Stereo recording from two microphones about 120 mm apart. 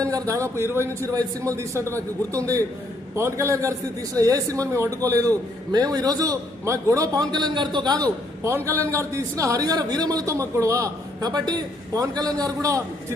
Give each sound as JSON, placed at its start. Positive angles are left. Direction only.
{"t": 0.0, "sound": "a man's voice", "side_deg": -25}
{"t": 8.4, "sound": "a man's voice", "side_deg": -20}